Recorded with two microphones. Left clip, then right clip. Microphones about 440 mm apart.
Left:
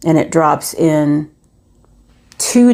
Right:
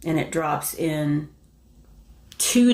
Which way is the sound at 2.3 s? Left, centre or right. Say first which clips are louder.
Left 7 dB; left.